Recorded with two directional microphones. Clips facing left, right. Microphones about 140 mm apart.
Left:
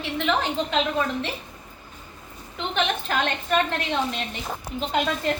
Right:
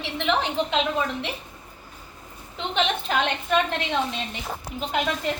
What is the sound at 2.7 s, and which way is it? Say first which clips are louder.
A woman's voice: right 1 dB; 15° right (ahead or behind).